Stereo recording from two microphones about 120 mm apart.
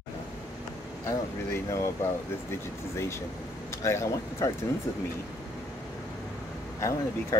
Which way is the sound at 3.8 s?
25° left (ahead or behind).